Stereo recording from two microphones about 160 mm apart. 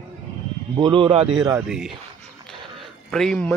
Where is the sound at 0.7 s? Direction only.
30° right (ahead or behind).